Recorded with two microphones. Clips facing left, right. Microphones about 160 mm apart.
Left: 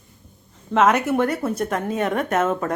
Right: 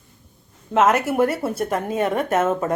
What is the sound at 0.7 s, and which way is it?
A woman's voice, 5° right (ahead or behind).